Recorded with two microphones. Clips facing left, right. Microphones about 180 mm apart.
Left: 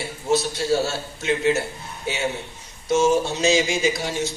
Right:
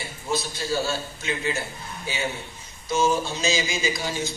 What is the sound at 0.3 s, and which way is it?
A man's voice, 70° left (ahead or behind).